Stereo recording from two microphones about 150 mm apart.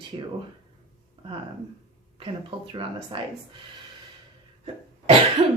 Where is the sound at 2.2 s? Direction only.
35° right (ahead or behind).